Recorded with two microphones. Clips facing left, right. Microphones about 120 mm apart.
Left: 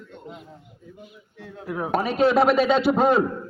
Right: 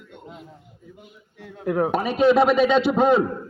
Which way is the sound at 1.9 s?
5° left (ahead or behind).